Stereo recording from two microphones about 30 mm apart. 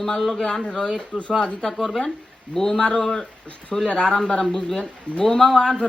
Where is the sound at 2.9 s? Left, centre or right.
Left.